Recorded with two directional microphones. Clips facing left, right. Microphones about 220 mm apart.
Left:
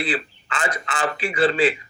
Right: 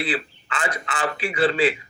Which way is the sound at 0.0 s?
45° left (ahead or behind).